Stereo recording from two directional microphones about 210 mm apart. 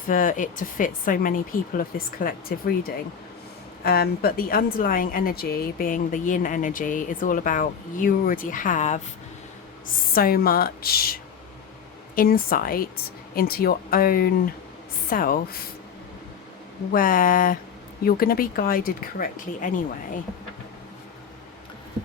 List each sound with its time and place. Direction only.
0.1 s speech: 40° left (ahead or behind)
3.8 s speech: 45° left (ahead or behind)
16.9 s speech: 40° left (ahead or behind)